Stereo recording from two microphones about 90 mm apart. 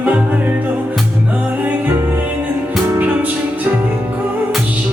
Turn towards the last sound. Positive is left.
turn(degrees=-20)  # may be behind; listen again after turning